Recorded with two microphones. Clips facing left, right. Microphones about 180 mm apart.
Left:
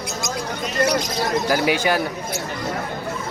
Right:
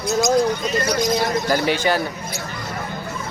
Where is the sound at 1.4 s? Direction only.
5° left (ahead or behind).